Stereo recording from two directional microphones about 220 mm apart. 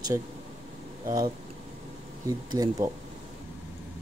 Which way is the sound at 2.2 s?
15° right (ahead or behind).